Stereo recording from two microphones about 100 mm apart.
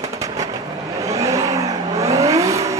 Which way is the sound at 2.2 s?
35° right (ahead or behind).